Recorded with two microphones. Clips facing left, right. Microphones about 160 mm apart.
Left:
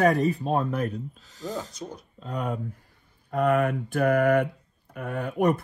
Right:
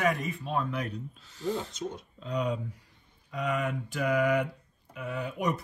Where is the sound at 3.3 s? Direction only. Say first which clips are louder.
Left 8 dB; 55° left (ahead or behind).